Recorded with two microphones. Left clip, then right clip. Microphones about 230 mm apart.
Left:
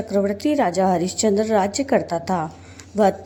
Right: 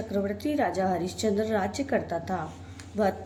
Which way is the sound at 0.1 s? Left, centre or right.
Left.